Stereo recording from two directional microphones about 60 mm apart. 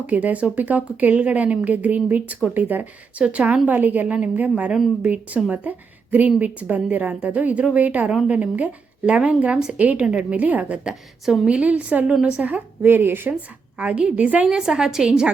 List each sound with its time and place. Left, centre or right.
0.1 s a woman's voice: right
9.7 s a woman's voice: right
12.8 s speech: right
13.7 s a woman's voice: centre
14.4 s a woman's voice: centre